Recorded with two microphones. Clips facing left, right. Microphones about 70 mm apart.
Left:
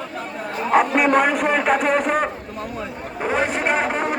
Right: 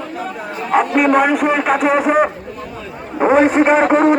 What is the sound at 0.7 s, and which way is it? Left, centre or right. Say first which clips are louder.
A man's voice: right 3 dB; centre.